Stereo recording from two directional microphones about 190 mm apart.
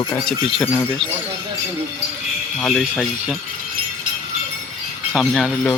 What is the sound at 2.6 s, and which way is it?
Speech, 5° left (ahead or behind).